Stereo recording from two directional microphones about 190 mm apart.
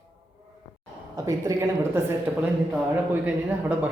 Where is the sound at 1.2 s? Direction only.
20° right (ahead or behind).